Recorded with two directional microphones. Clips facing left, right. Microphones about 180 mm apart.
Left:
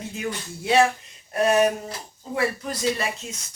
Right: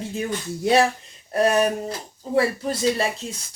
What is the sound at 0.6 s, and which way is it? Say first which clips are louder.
Speech: right 1 dB; 40° right (ahead or behind).